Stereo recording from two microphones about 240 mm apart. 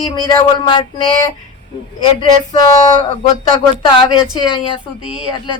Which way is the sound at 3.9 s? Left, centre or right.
Left.